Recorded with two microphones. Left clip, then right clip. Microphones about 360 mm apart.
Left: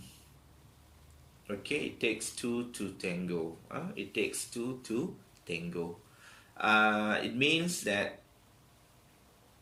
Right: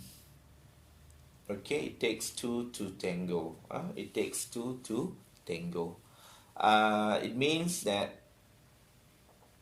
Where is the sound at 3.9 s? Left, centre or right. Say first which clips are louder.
Left 3 dB; centre.